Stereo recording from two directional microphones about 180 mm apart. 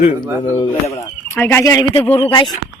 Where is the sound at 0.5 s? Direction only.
20° left (ahead or behind).